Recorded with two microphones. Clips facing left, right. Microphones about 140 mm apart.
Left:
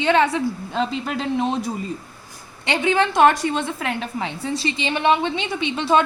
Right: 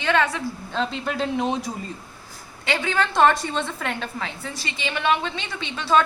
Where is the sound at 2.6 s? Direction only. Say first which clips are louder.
Left 4 dB; 20° left (ahead or behind).